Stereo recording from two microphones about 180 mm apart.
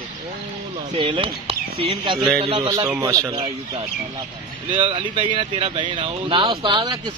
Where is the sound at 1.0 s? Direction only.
30° right (ahead or behind).